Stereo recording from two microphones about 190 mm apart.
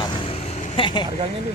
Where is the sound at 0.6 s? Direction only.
25° left (ahead or behind).